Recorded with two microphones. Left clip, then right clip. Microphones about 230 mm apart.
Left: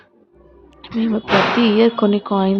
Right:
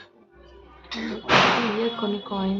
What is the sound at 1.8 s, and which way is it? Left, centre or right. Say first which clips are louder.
Speech: left 11 dB; left.